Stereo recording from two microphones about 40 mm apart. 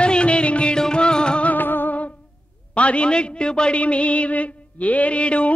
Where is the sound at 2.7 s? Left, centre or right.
Left.